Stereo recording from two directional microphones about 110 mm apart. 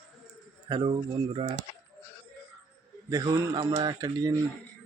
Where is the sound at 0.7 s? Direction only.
45° right (ahead or behind).